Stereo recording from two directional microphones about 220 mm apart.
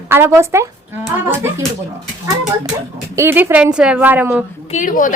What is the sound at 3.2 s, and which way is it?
A woman's voice, 10° right (ahead or behind).